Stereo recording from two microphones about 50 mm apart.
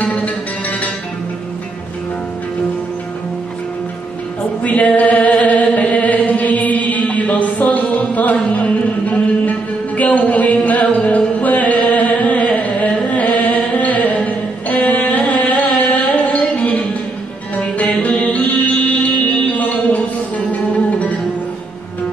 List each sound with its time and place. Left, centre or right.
0.0 s music: left
4.6 s chant: left
8.0 s music: left